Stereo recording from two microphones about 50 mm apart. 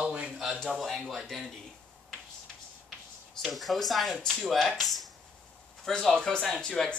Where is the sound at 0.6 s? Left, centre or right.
Centre.